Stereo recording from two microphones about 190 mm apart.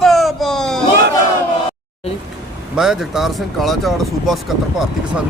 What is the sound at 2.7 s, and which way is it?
Speech, centre (ahead or behind).